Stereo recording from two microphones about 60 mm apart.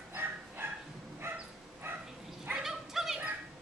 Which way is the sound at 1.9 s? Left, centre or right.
Right.